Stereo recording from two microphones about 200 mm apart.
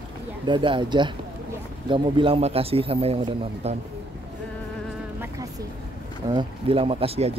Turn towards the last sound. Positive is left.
turn(degrees=-30)  # may be behind; listen again after turning